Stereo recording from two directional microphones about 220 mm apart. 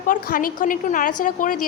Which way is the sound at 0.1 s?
40° left (ahead or behind).